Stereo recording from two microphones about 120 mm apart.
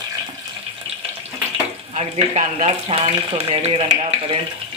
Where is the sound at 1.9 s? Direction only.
55° right (ahead or behind).